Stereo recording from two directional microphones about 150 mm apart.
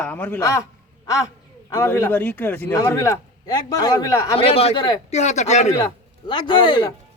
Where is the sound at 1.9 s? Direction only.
15° left (ahead or behind).